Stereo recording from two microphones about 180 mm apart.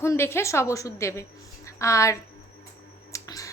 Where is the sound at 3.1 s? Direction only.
20° left (ahead or behind).